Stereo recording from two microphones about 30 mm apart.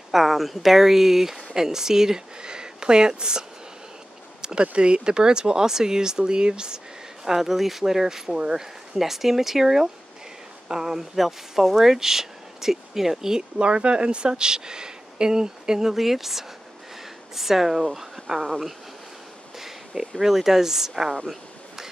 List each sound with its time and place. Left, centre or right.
0.1 s speech: centre; by 6.8 s right
7.2 s speech: centre
8.4 s speech: right
8.9 s speech: centre
13.4 s speech: right; by 18.7 s centre
20.2 s speech: centre